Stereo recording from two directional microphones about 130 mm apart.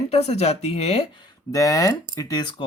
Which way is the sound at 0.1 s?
55° left (ahead or behind).